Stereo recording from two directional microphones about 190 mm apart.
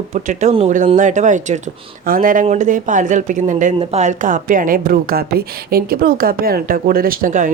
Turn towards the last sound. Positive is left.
turn(degrees=-45)  # may be behind; listen again after turning